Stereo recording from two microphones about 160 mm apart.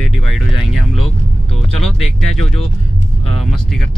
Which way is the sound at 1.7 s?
Centre (ahead or behind).